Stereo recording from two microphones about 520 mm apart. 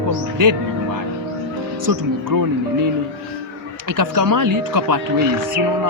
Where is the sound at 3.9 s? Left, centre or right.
Right.